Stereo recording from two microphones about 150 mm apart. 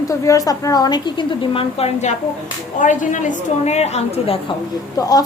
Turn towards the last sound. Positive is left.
turn(degrees=25)  # may be behind; listen again after turning